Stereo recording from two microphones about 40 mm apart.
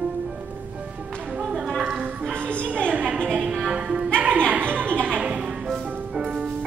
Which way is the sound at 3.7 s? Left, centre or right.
Right.